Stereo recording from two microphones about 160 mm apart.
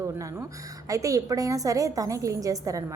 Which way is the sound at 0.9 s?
20° right (ahead or behind).